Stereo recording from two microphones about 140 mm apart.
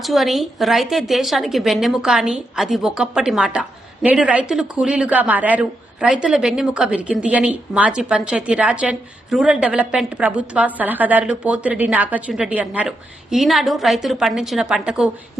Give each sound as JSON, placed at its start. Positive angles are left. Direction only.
{"t": 0.0, "sound": "a woman's voice", "side_deg": 0}